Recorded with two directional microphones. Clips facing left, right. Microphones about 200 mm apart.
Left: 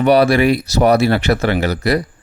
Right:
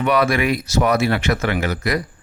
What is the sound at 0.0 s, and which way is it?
Speech, 35° left (ahead or behind).